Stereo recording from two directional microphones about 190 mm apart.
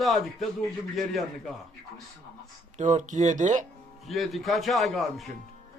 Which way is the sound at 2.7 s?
40° right (ahead or behind).